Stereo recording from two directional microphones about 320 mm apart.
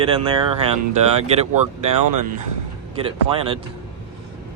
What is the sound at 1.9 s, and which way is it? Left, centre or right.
Speech, right.